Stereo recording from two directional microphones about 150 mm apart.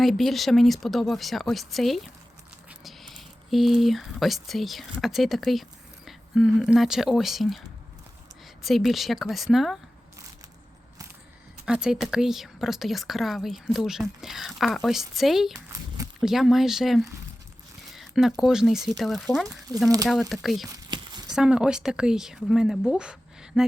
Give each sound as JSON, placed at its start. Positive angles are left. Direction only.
{"t": 0.0, "sound": "speech", "side_deg": 0}
{"t": 8.6, "sound": "speech", "side_deg": 0}
{"t": 11.6, "sound": "speech", "side_deg": -5}
{"t": 20.7, "sound": "a sound", "side_deg": -30}
{"t": 21.3, "sound": "speech", "side_deg": -5}